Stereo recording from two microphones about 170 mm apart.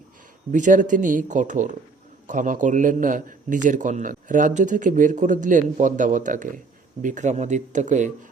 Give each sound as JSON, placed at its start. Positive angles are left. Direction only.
{"t": 0.5, "sound": "a man's voice", "side_deg": -50}